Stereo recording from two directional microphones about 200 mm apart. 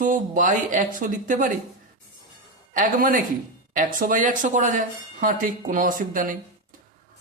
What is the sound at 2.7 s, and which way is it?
Speech, 45° right (ahead or behind).